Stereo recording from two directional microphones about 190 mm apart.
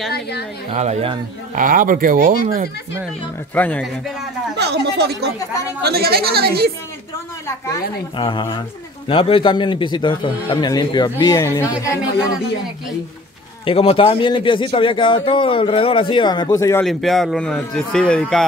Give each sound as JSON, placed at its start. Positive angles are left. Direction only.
{"t": 0.1, "sound": "a woman's voice", "side_deg": 60}
{"t": 0.7, "sound": "speech", "side_deg": -35}
{"t": 1.5, "sound": "speech", "side_deg": -45}
{"t": 3.5, "sound": "speech", "side_deg": 5}
{"t": 4.6, "sound": "speech", "side_deg": -60}
{"t": 7.4, "sound": "speech", "side_deg": 15}
{"t": 8.2, "sound": "speech", "side_deg": 25}
{"t": 13.7, "sound": "speech", "side_deg": 30}
{"t": 16.8, "sound": "a man's voice", "side_deg": 0}